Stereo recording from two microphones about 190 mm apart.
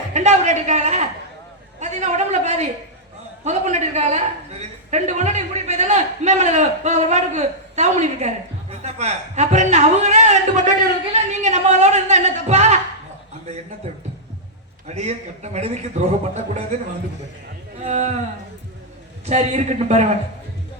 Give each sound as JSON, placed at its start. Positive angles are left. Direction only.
{"t": 0.1, "sound": "a man's voice", "side_deg": -35}
{"t": 14.8, "sound": "a man's voice", "side_deg": -35}
{"t": 17.8, "sound": "a man's voice", "side_deg": -35}
{"t": 19.2, "sound": "a man's voice", "side_deg": -35}